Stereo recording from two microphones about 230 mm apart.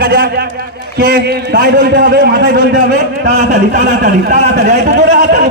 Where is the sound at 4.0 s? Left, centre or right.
Right.